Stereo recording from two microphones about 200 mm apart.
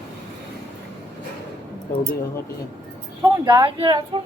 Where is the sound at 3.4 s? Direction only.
25° right (ahead or behind).